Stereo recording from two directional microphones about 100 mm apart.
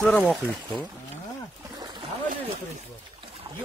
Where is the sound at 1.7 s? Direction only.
45° right (ahead or behind).